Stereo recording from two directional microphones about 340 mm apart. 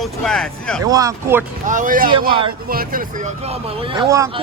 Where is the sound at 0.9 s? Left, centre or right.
Centre.